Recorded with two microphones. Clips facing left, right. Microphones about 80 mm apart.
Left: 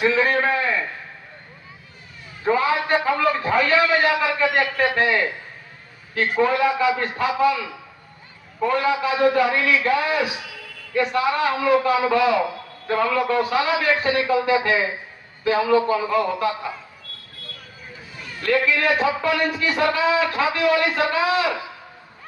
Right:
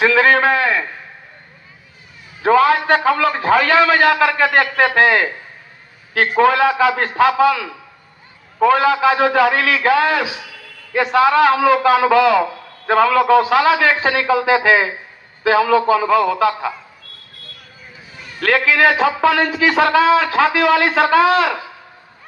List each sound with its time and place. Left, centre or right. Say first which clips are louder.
0.0 s a sound: right 6 dB; right
2.4 s a man's voice: right 7 dB; right
18.3 s a man's voice: right 5 dB; right